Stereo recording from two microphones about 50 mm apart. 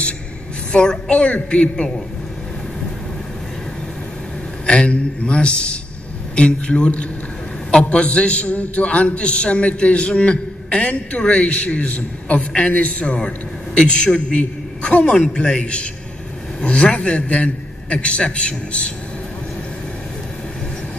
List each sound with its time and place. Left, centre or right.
0.7 s a man's voice: centre
4.6 s a man's voice: left